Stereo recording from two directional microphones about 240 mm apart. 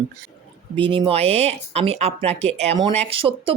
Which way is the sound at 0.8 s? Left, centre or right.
Right.